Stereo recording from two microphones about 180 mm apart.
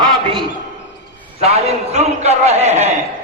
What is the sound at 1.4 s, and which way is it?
A man's voice, 35° right (ahead or behind).